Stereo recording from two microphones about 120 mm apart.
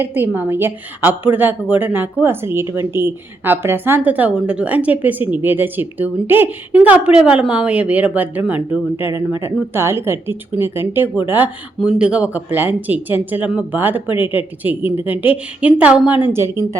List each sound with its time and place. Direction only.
0.0 s a woman's voice: 15° right (ahead or behind)